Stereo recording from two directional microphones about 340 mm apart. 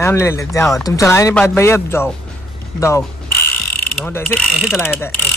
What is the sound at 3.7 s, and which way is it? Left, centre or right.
Mechanisms, centre.